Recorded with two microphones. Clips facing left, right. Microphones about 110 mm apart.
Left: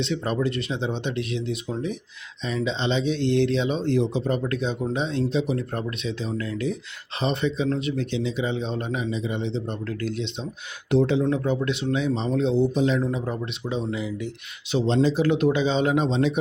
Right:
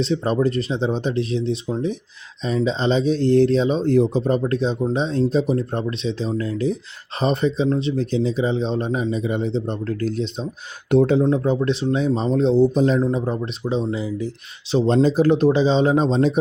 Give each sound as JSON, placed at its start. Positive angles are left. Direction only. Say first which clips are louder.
{"t": 0.0, "sound": "speech", "louder": "right 5 dB", "side_deg": -35}
{"t": 5.7, "sound": "speech", "louder": "right 5 dB", "side_deg": -30}
{"t": 11.3, "sound": "speech", "louder": "right 5 dB", "side_deg": -35}